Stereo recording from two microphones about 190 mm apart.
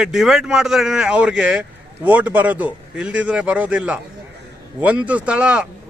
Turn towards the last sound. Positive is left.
turn(degrees=-5)  # may be behind; listen again after turning